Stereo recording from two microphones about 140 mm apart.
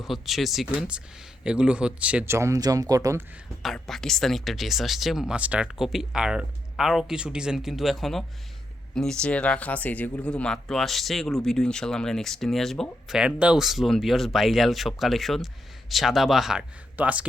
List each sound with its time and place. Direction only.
0.0 s speech: centre (ahead or behind); by 3.2 s 25° right (ahead or behind)
3.6 s speech: centre (ahead or behind)